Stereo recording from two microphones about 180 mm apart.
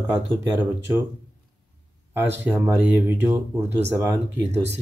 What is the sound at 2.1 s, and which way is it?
Speech, 10° right (ahead or behind).